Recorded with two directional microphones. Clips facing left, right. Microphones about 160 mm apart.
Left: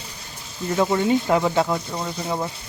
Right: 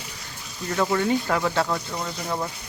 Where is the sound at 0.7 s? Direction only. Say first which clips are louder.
Left 3 dB; 20° left (ahead or behind).